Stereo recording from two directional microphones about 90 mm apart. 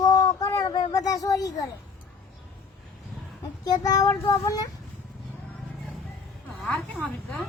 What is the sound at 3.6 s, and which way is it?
Speech, 45° left (ahead or behind).